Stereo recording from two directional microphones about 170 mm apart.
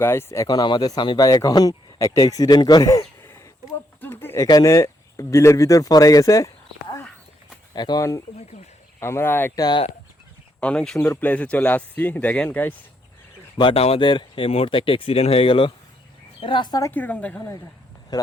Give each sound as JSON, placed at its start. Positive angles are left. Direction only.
{"t": 0.0, "sound": "speech", "side_deg": 15}
{"t": 4.0, "sound": "a sound", "side_deg": 15}
{"t": 4.4, "sound": "speech", "side_deg": 20}
{"t": 13.6, "sound": "speech", "side_deg": 35}
{"t": 16.9, "sound": "speech", "side_deg": 10}
{"t": 18.1, "sound": "speech", "side_deg": 25}